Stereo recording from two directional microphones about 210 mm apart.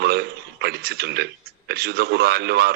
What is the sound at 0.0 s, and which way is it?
A man's voice, 50° right (ahead or behind).